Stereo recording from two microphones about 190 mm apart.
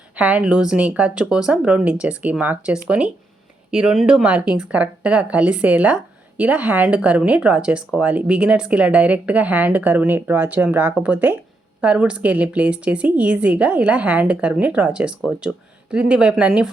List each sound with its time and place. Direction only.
0.2 s a woman's voice: 10° right (ahead or behind)